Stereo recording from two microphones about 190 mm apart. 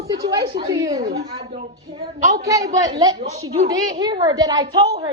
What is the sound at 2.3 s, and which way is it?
A woman's voice, 20° right (ahead or behind).